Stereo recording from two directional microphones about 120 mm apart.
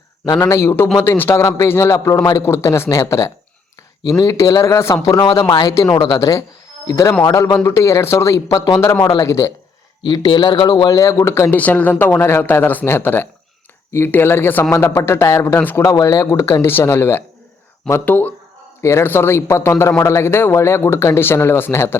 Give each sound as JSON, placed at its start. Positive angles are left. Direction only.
{"t": 0.4, "sound": "a man's voice", "side_deg": 25}
{"t": 9.0, "sound": "speech", "side_deg": 40}
{"t": 9.2, "sound": "a man's voice", "side_deg": 25}
{"t": 10.0, "sound": "speech", "side_deg": 35}
{"t": 10.8, "sound": "a man's voice", "side_deg": 30}
{"t": 11.5, "sound": "a man's voice", "side_deg": 15}
{"t": 15.8, "sound": "a man's voice", "side_deg": 25}